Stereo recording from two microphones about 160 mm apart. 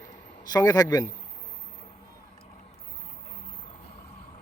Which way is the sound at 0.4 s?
25° left (ahead or behind).